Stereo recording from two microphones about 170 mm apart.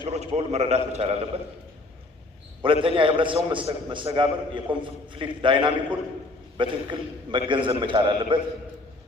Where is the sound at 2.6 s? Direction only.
30° right (ahead or behind).